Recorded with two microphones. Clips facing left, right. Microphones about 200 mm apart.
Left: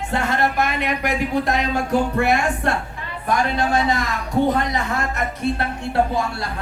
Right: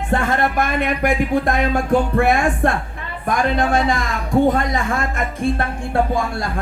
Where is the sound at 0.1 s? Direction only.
50° right (ahead or behind).